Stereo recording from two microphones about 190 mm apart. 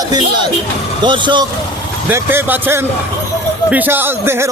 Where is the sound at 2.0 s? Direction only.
10° right (ahead or behind).